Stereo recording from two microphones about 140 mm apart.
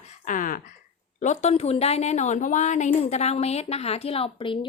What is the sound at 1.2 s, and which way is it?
A woman's voice, 55° left (ahead or behind).